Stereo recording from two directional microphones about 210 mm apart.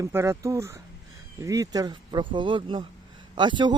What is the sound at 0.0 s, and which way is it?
Speech, 10° right (ahead or behind).